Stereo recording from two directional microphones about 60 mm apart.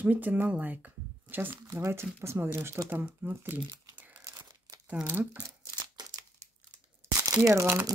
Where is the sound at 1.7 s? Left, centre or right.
Right.